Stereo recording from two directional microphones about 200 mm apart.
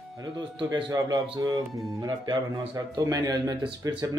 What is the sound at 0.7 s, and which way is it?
Speech, 20° right (ahead or behind).